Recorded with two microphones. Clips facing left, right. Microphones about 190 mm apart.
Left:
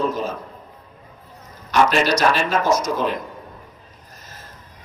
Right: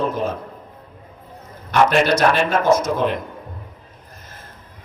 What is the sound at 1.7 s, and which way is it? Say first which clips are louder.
A man's voice: right 2 dB; 55° right (ahead or behind).